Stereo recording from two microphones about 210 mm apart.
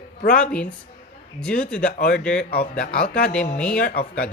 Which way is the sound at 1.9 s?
50° left (ahead or behind).